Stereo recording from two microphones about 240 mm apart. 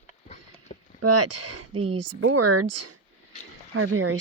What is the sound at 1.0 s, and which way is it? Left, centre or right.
Speech, right.